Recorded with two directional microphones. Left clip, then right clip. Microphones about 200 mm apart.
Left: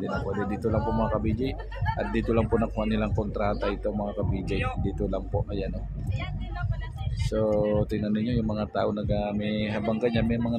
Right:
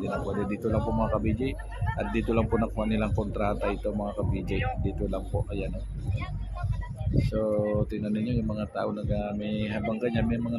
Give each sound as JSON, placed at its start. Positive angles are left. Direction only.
{"t": 0.5, "sound": "speech", "side_deg": 0}
{"t": 7.2, "sound": "speech", "side_deg": 15}